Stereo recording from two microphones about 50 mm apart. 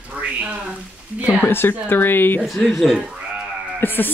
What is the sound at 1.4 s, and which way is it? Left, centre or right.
Speech, left.